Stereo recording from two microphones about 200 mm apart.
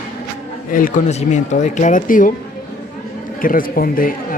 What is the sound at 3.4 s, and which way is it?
Speech, 45° left (ahead or behind).